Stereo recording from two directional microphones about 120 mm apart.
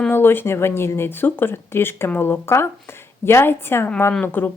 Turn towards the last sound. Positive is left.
turn(degrees=15)  # may be behind; listen again after turning